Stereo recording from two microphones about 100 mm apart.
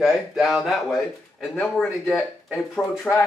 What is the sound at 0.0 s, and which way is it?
Speech, centre (ahead or behind).